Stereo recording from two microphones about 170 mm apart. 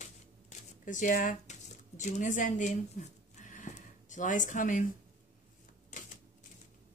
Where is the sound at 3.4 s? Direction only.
45° left (ahead or behind).